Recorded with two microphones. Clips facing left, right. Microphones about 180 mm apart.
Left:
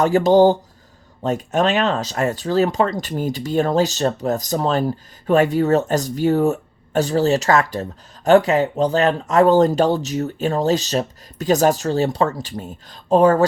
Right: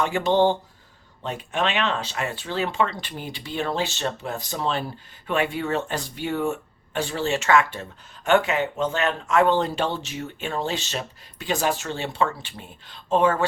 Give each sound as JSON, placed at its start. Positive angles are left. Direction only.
{"t": 0.0, "sound": "speech", "side_deg": 40}